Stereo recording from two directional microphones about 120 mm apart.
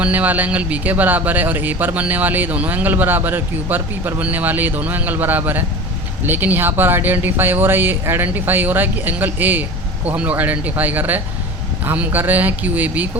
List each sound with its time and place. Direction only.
0.0 s speech: 15° right (ahead or behind)